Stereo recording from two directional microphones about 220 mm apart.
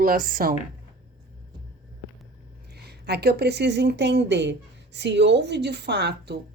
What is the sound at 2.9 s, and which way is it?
A woman's voice, 45° right (ahead or behind).